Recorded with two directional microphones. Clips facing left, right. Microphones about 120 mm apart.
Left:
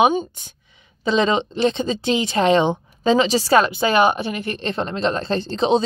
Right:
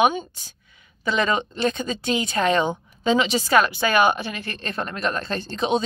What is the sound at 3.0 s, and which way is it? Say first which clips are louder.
A woman's voice: left 4 dB; 35° left (ahead or behind).